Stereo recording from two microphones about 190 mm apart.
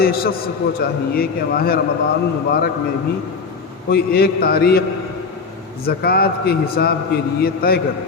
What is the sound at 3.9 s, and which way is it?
A man's voice, 55° left (ahead or behind).